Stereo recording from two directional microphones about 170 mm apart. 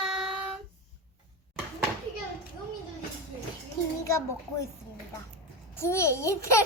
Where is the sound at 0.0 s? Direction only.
5° right (ahead or behind).